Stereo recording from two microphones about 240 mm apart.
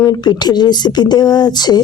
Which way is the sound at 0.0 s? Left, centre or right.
Centre.